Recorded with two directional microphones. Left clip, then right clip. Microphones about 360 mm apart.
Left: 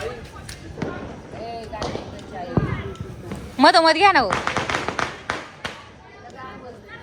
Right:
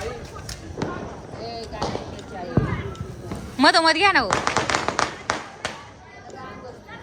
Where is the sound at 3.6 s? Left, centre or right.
Centre.